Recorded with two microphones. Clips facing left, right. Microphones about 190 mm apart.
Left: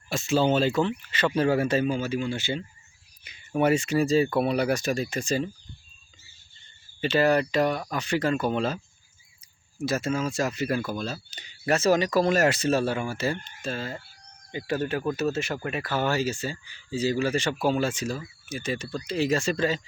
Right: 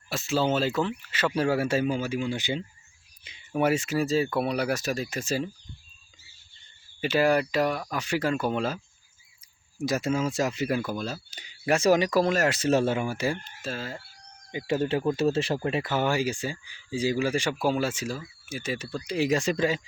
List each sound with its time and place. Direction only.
0.1 s speech: centre (ahead or behind)
3.5 s speech: 5° right (ahead or behind)
7.0 s speech: 10° right (ahead or behind)
9.8 s speech: 15° right (ahead or behind)
12.3 s speech: centre (ahead or behind)
12.6 s speech: 20° right (ahead or behind); by 14.0 s centre (ahead or behind)
14.5 s speech: 25° right (ahead or behind)